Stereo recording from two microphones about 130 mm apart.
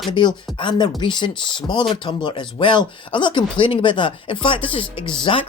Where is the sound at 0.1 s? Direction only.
35° left (ahead or behind).